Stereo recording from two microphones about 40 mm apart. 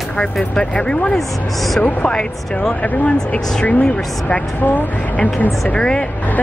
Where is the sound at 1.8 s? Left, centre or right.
Left.